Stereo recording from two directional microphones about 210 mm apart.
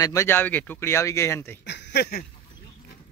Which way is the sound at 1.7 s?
50° left (ahead or behind).